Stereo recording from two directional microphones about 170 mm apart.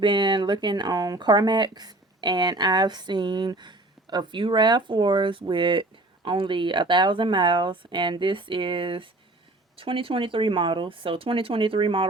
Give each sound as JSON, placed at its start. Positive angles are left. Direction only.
{"t": 0.0, "sound": "speech", "side_deg": -30}